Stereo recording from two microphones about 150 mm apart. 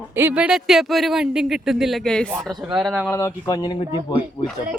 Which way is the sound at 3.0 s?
15° left (ahead or behind).